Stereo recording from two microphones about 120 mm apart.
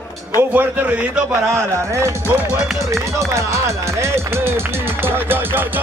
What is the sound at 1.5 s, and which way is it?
Speech, 25° right (ahead or behind).